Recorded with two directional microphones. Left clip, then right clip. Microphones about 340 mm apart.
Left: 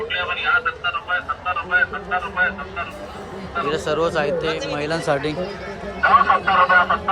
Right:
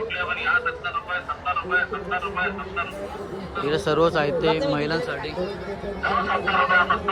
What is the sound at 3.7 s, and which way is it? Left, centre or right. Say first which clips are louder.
Speech: right 1 dB; centre.